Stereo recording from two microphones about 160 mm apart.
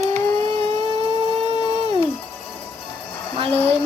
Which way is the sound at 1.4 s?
40° right (ahead or behind).